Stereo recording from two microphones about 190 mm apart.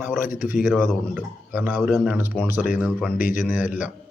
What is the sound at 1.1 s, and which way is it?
A man's voice, 10° right (ahead or behind).